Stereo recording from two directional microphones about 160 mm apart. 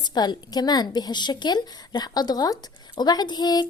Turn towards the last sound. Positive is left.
turn(degrees=25)  # may be behind; listen again after turning